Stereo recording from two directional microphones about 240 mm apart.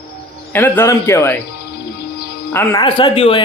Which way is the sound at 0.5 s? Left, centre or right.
Centre.